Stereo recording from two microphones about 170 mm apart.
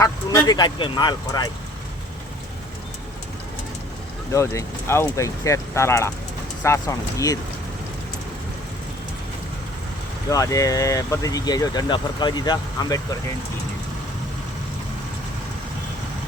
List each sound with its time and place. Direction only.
0.0 s speech: 20° left (ahead or behind)
4.3 s speech: 20° left (ahead or behind)
10.2 s speech: 20° left (ahead or behind)